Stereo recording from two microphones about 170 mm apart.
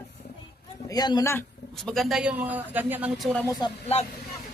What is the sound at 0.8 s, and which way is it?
Speech, 25° left (ahead or behind).